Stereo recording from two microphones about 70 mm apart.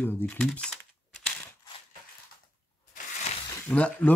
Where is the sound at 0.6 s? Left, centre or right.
Centre.